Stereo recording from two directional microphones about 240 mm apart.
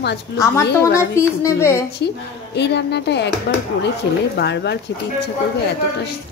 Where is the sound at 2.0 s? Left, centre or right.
Left.